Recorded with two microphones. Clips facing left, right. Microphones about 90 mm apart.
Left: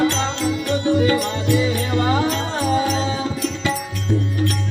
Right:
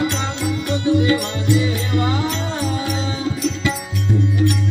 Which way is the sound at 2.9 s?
35° left (ahead or behind).